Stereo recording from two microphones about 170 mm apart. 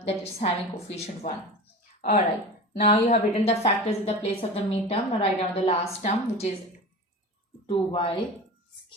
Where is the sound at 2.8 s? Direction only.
40° left (ahead or behind).